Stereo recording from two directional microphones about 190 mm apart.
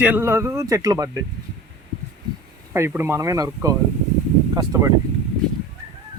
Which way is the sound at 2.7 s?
10° right (ahead or behind).